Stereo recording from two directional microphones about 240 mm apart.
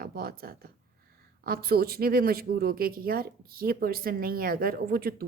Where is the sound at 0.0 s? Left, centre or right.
Right.